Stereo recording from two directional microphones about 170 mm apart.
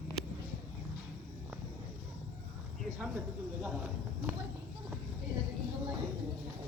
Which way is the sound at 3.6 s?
5° right (ahead or behind).